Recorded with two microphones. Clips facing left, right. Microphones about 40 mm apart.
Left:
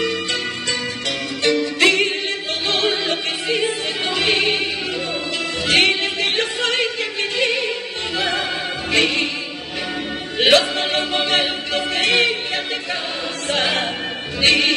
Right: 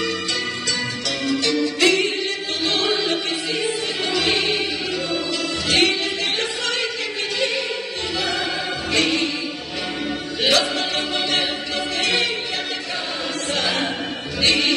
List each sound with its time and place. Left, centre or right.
1.4 s music: left
2.7 s choir: left
5.7 s music: left
8.9 s music: left
10.4 s choir: left
13.5 s music: left